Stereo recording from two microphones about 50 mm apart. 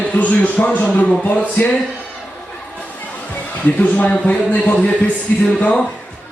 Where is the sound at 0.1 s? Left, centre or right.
Left.